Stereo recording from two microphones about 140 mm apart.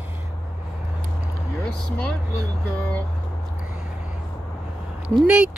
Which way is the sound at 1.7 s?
10° left (ahead or behind).